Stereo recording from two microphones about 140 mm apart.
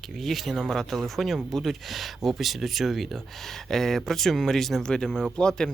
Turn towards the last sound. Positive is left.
turn(degrees=5)  # may be behind; listen again after turning